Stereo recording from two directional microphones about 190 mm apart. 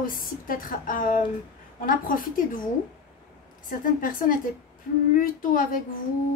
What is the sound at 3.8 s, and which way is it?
A woman's voice, 45° left (ahead or behind).